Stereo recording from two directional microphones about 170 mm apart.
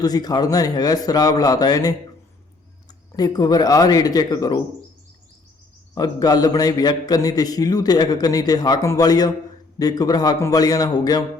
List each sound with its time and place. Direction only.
0.0 s a man's voice: 20° left (ahead or behind)
3.2 s a man's voice: 20° left (ahead or behind)
5.9 s a man's voice: 20° left (ahead or behind)